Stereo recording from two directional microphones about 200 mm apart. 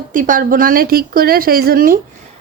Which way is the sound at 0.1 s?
40° right (ahead or behind).